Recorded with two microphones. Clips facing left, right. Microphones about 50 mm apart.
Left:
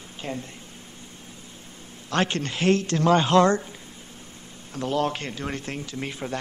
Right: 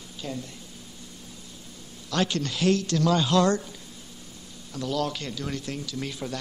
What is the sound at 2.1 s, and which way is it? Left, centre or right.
Speech, left.